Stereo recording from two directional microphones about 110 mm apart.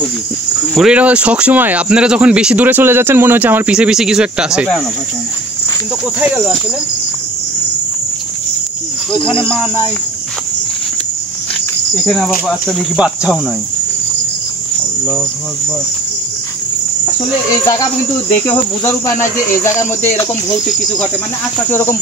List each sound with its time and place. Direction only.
0.7 s speech: 10° right (ahead or behind)
3.7 s speech: 5° right (ahead or behind)
6.1 s speech: 10° right (ahead or behind)
12.0 s speech: centre (ahead or behind)
12.9 s speech: 10° right (ahead or behind)
18.5 s cricket: 25° left (ahead or behind)
20.4 s cricket: 35° left (ahead or behind)
21.6 s cricket: 20° left (ahead or behind)